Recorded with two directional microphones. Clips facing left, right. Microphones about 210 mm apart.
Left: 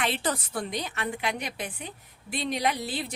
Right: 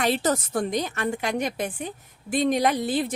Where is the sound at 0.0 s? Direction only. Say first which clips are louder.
Right 6 dB; 40° right (ahead or behind).